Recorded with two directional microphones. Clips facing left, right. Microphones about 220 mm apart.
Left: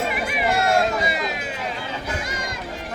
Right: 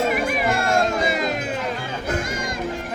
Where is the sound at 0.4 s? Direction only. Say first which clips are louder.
Left 4 dB; 45° right (ahead or behind).